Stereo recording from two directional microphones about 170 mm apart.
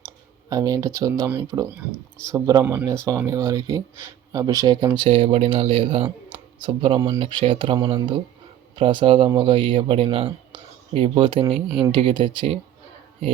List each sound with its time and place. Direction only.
0.5 s speech: 20° right (ahead or behind)